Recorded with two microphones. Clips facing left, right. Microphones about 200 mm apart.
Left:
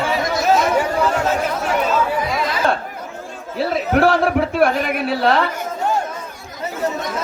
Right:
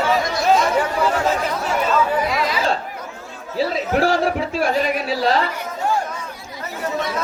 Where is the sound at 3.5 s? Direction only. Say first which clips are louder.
Left 2 dB; 60° left (ahead or behind).